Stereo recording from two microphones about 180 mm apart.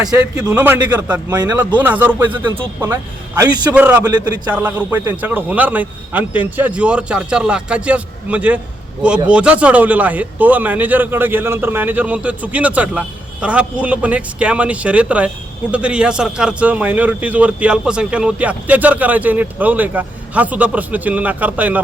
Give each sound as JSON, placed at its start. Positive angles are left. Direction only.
{"t": 0.1, "sound": "a man's voice", "side_deg": -10}
{"t": 3.8, "sound": "a man's voice", "side_deg": -10}
{"t": 4.0, "sound": "a man's voice", "side_deg": -20}
{"t": 4.5, "sound": "a man's voice", "side_deg": -10}